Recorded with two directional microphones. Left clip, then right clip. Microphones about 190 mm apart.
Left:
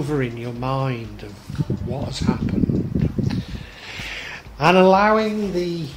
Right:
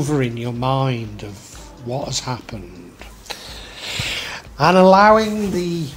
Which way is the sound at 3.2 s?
35° right (ahead or behind).